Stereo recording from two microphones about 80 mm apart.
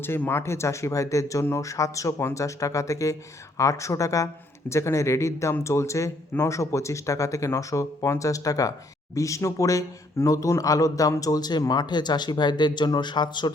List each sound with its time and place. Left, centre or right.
0.2 s speech: left